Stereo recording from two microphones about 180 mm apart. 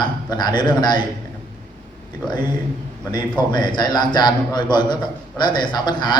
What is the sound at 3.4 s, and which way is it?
A man's voice, 25° left (ahead or behind).